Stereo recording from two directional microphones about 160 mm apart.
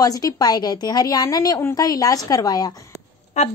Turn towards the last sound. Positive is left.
turn(degrees=45)  # may be behind; listen again after turning